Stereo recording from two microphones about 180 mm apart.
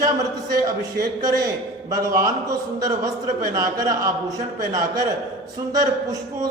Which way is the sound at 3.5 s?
20° right (ahead or behind).